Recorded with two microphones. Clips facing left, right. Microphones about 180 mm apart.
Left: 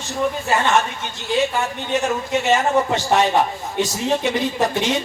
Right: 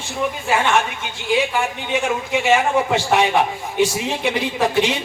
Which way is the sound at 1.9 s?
10° right (ahead or behind).